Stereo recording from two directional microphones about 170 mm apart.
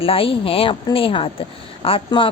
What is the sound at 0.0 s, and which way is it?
Speech, 30° left (ahead or behind).